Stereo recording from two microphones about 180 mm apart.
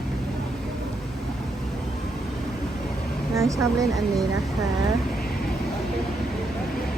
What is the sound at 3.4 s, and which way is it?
Speech, 15° right (ahead or behind).